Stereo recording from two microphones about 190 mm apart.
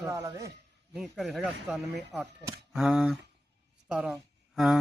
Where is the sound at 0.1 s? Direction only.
15° right (ahead or behind).